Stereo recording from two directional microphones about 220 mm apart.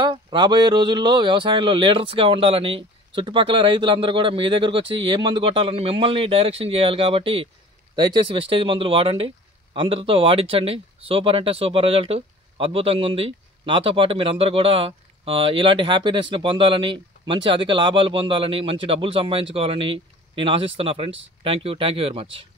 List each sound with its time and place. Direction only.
0.0 s speech: 20° right (ahead or behind)